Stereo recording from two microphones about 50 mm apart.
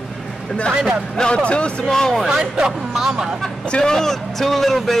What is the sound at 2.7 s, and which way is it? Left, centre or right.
Speech, centre.